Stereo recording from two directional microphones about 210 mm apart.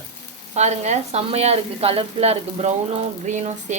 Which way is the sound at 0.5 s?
30° right (ahead or behind).